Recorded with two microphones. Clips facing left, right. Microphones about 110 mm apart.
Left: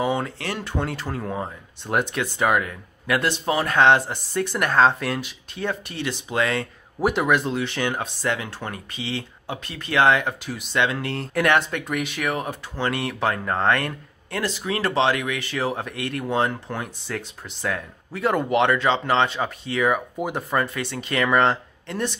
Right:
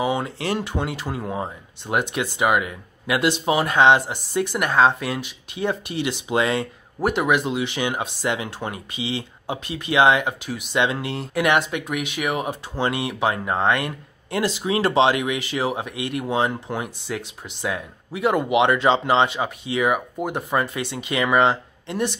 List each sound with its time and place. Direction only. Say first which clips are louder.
0.0 s speech: even; 10° right (ahead or behind)
0.4 s speech: right 5 dB; 20° right (ahead or behind)
0.7 s speech: right 1 dB; 10° right (ahead or behind)
7.0 s speech: even; centre (ahead or behind)
10.7 s speech: right 1 dB; 15° right (ahead or behind)
12.2 s speech: right 2 dB; 15° right (ahead or behind)
20.2 s speech: right 1 dB; centre (ahead or behind)